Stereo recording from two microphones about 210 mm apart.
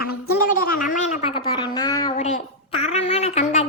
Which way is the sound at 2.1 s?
30° left (ahead or behind).